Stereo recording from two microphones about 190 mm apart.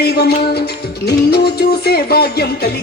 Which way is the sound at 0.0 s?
55° left (ahead or behind).